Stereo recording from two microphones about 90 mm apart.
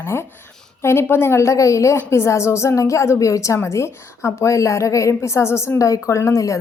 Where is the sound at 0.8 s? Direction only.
30° left (ahead or behind).